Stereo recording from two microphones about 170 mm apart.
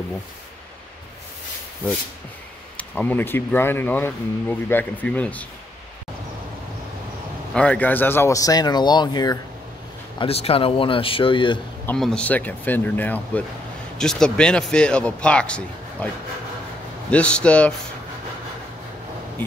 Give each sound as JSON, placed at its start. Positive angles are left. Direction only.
{"t": 2.8, "sound": "speech", "side_deg": 10}
{"t": 7.5, "sound": "speech", "side_deg": 5}
{"t": 10.1, "sound": "speech", "side_deg": 35}
{"t": 11.8, "sound": "speech", "side_deg": 5}
{"t": 17.1, "sound": "speech", "side_deg": 5}